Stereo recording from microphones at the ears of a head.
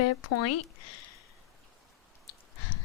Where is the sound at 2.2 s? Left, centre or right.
Left.